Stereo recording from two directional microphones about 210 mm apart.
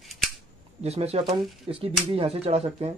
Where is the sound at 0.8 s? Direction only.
30° right (ahead or behind).